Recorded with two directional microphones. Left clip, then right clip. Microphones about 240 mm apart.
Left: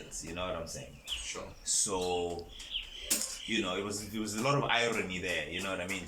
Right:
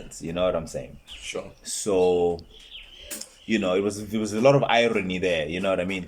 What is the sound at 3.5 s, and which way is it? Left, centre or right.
A man's voice, right.